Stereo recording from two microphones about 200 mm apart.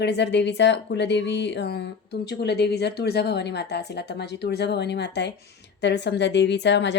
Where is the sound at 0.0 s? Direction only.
60° left (ahead or behind).